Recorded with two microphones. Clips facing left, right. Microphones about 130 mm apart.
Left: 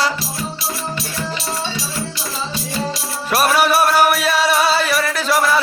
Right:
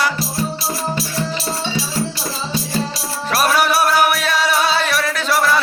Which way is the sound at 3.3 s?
5° left (ahead or behind).